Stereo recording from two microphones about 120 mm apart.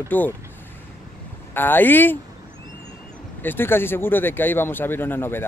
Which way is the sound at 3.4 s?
15° left (ahead or behind).